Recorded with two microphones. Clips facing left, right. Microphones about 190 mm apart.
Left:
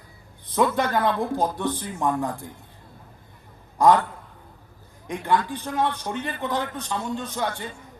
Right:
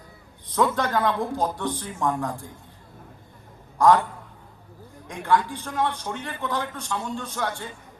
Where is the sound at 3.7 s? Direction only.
15° left (ahead or behind).